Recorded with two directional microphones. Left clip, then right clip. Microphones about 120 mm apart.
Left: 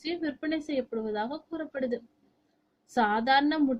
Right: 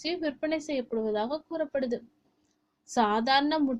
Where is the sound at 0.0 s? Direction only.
35° right (ahead or behind).